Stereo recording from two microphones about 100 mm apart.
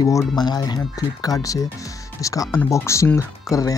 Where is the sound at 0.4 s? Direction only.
45° left (ahead or behind).